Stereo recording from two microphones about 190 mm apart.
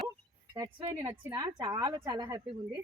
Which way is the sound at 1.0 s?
20° right (ahead or behind).